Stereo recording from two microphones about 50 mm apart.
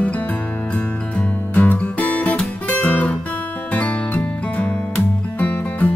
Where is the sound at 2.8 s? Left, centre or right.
Left.